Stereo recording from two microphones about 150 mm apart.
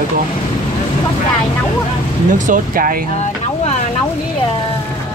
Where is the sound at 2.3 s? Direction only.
60° right (ahead or behind).